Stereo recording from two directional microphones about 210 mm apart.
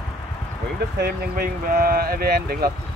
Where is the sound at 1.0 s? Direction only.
45° right (ahead or behind).